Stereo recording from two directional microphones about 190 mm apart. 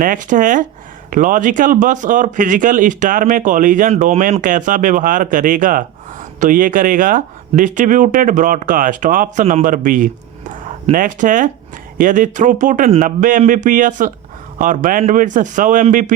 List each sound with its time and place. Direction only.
0.0 s speech: 45° right (ahead or behind)